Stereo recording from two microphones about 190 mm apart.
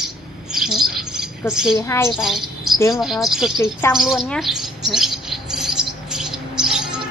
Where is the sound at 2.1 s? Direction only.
Centre (ahead or behind).